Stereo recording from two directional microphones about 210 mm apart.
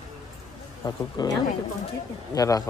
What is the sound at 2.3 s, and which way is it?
Speech, 15° left (ahead or behind).